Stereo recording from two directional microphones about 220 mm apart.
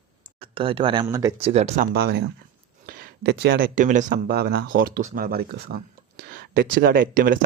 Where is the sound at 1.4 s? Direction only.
30° right (ahead or behind).